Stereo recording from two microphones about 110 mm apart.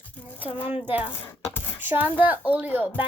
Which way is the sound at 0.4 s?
55° left (ahead or behind).